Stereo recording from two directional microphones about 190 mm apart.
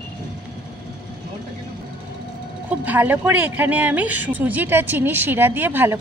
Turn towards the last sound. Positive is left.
turn(degrees=-10)  # may be behind; listen again after turning